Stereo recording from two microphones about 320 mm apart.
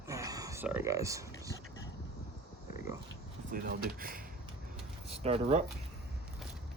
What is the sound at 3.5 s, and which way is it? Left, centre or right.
Speech, right.